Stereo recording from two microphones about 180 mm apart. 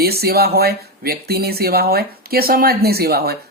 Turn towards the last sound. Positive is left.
turn(degrees=-60)  # may be behind; listen again after turning